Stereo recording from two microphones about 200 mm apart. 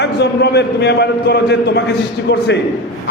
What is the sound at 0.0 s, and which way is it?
A man's voice, 55° left (ahead or behind).